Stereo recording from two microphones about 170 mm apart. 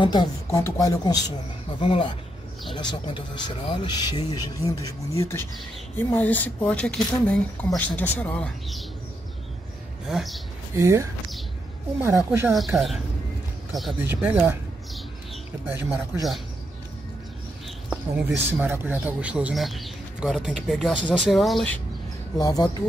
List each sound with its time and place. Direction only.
0.0 s speech: 25° left (ahead or behind)
1.8 s speech: 35° left (ahead or behind); by 8.8 s 5° left (ahead or behind)
10.0 s speech: centre (ahead or behind)
10.8 s speech: 15° right (ahead or behind); by 13.9 s centre (ahead or behind)
14.0 s speech: 10° right (ahead or behind)
17.8 s speech: 10° right (ahead or behind)
22.4 s speech: 20° left (ahead or behind)